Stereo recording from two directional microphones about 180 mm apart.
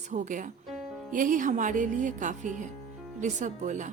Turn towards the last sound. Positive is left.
turn(degrees=-45)  # may be behind; listen again after turning